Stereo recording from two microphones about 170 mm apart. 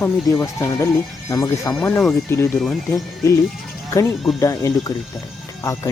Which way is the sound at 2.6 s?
Centre (ahead or behind).